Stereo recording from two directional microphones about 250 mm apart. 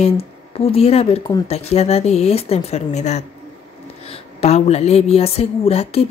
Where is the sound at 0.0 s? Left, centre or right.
Left.